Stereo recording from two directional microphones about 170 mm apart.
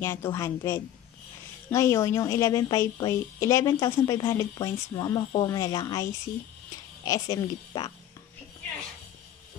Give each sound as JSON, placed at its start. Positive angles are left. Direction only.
{"t": 0.0, "sound": "a woman's voice", "side_deg": 15}
{"t": 7.1, "sound": "a woman's voice", "side_deg": 20}